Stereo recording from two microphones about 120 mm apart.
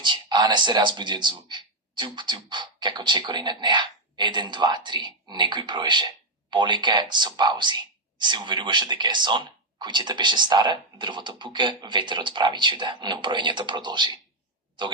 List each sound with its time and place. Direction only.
0.0 s speech: 40° right (ahead or behind)